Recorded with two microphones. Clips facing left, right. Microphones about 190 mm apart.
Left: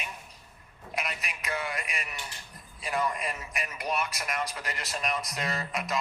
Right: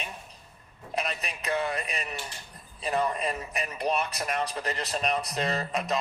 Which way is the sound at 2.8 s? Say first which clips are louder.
Right 3 dB; 30° right (ahead or behind).